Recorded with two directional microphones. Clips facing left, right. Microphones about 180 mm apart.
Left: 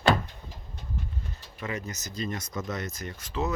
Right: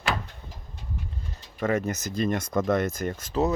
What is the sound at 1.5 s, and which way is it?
Speech, 50° right (ahead or behind).